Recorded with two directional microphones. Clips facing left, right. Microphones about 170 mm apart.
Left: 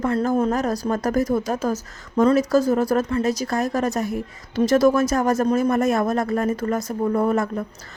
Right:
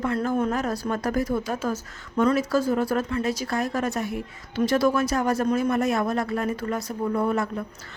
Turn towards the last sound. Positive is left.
turn(degrees=45)  # may be behind; listen again after turning